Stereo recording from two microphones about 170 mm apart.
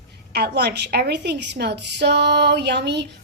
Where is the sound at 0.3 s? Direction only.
70° right (ahead or behind).